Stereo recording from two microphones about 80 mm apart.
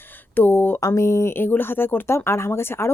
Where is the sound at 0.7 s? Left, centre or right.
Left.